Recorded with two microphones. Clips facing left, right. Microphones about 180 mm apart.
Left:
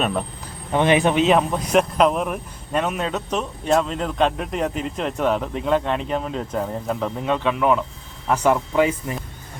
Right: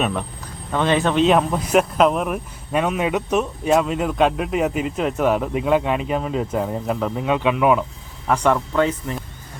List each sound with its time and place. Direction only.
0.7 s speech: 15° left (ahead or behind)
1.2 s speech: centre (ahead or behind)
8.3 s speech: 5° left (ahead or behind)